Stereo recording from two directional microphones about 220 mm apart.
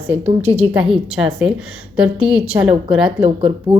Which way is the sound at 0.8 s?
Centre (ahead or behind).